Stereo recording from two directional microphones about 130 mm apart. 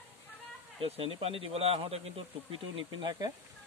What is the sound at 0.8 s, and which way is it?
A man's voice, 45° right (ahead or behind).